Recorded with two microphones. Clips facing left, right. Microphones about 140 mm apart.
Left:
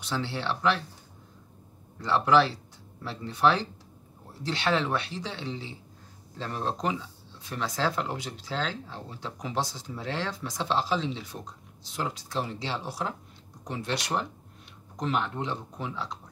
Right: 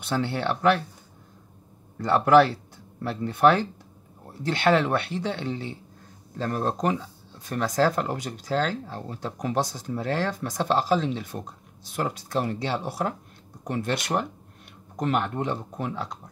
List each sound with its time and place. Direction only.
0.0 s speech: 55° right (ahead or behind)
2.0 s speech: 50° right (ahead or behind)
6.3 s speech: 45° right (ahead or behind)